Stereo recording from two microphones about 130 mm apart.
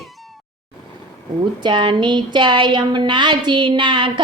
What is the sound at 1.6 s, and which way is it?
A woman's voice, 40° right (ahead or behind).